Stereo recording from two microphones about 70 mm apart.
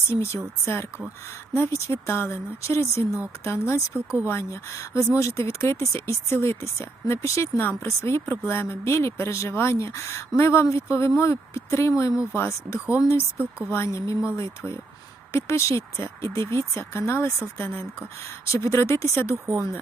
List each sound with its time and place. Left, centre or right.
0.1 s speech: left
18.4 s speech: left